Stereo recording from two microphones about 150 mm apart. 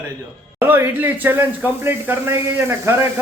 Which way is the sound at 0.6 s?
15° right (ahead or behind).